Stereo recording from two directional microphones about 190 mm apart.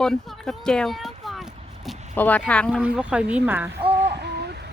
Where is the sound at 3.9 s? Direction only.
60° right (ahead or behind).